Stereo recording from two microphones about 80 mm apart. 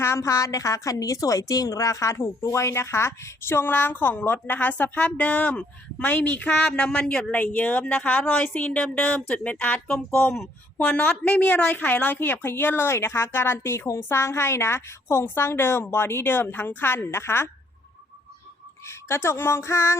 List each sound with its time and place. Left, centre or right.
0.0 s a woman's voice: left; by 10.0 s centre
10.2 s speech: centre
10.8 s a woman's voice: centre
18.9 s speech: left